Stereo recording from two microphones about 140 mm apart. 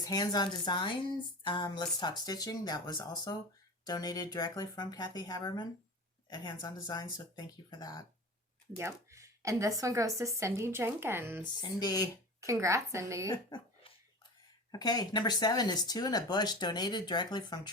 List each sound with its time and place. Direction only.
0.0 s speech: 30° left (ahead or behind)
8.8 s speech: 20° right (ahead or behind)
11.6 s speech: 30° left (ahead or behind)
12.4 s speech: 20° right (ahead or behind)
13.3 s a sound: 35° left (ahead or behind)
14.7 s speech: 30° left (ahead or behind)